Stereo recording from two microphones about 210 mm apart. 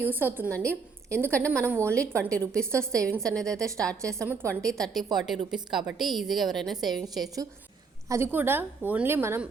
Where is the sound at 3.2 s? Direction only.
5° left (ahead or behind).